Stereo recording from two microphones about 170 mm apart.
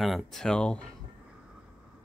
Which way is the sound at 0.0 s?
Centre (ahead or behind).